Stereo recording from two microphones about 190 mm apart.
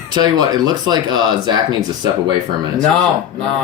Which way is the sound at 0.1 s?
20° right (ahead or behind).